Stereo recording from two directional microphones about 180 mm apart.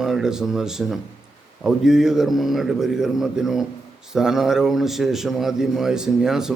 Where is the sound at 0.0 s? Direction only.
5° right (ahead or behind).